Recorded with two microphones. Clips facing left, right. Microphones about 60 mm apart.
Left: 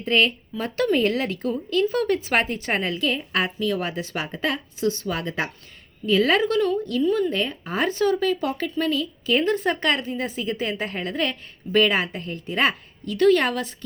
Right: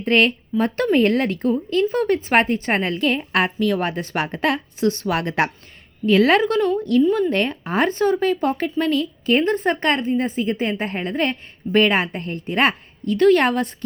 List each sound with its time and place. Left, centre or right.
0.0 s a woman's voice: right
1.7 s a woman's voice: right
6.1 s a woman's voice: right
7.9 s a woman's voice: right
9.4 s a woman's voice: right